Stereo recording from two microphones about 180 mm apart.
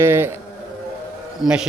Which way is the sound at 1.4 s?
5° right (ahead or behind).